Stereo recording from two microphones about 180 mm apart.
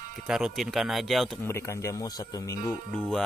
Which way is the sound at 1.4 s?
15° left (ahead or behind).